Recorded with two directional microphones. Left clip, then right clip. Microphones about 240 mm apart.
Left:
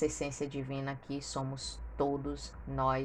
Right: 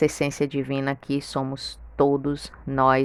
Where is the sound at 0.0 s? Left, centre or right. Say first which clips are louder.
Right 12 dB; right.